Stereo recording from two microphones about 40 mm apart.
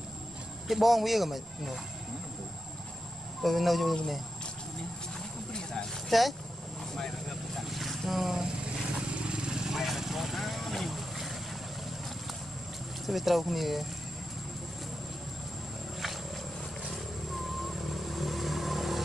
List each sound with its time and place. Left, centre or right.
0.7 s speech: centre
3.4 s speech: centre
5.5 s a sound: centre
6.0 s speech: centre
7.5 s vehicle: centre
9.0 s vehicle: right; by 11.3 s centre
13.0 s speech: centre
17.5 s vehicle: centre